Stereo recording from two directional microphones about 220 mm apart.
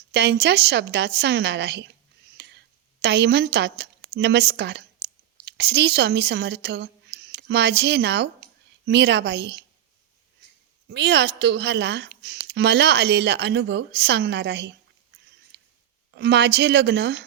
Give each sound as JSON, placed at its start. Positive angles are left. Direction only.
{"t": 0.1, "sound": "a woman's voice", "side_deg": -50}
{"t": 2.4, "sound": "clicking", "side_deg": -50}
{"t": 3.0, "sound": "a woman's voice", "side_deg": -50}
{"t": 10.9, "sound": "a woman's voice", "side_deg": -50}
{"t": 16.1, "sound": "a woman's voice", "side_deg": -50}